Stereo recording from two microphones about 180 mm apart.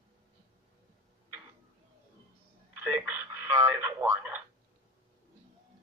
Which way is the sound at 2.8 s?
10° right (ahead or behind).